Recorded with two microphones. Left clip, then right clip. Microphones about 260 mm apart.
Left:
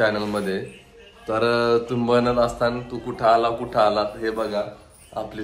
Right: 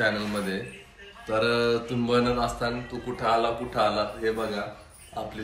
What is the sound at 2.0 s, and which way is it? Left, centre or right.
Speech, left.